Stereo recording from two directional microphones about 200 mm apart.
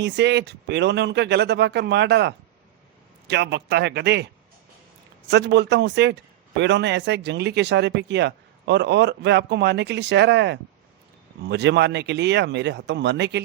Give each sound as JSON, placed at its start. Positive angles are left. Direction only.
{"t": 0.0, "sound": "speech", "side_deg": -60}
{"t": 5.3, "sound": "speech", "side_deg": -60}